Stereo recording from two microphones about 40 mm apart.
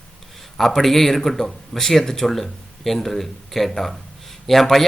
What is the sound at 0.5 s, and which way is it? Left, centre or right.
A man's voice, centre.